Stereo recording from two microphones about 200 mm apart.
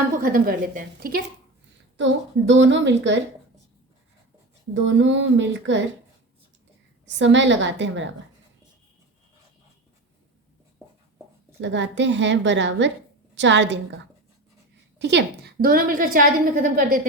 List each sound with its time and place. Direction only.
0.2 s a woman's voice: 45° right (ahead or behind)
2.0 s a woman's voice: 65° right (ahead or behind)
4.7 s speech: 65° right (ahead or behind)
7.2 s a woman's voice: 65° right (ahead or behind)
11.6 s a woman's voice: 65° right (ahead or behind); by 17.1 s 40° right (ahead or behind)